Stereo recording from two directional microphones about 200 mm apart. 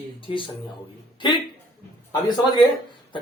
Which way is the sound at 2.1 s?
20° left (ahead or behind).